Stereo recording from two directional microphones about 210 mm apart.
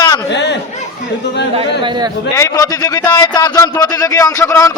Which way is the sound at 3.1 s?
15° left (ahead or behind).